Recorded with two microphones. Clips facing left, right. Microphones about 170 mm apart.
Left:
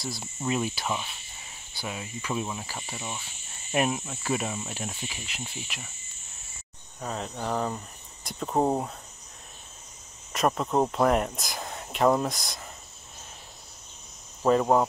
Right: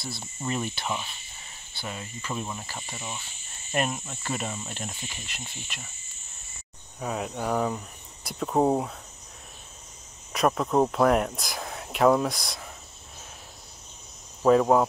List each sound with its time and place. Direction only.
0.0 s speech: 10° left (ahead or behind)
7.0 s speech: 5° right (ahead or behind)
10.3 s speech: centre (ahead or behind)
14.4 s speech: centre (ahead or behind)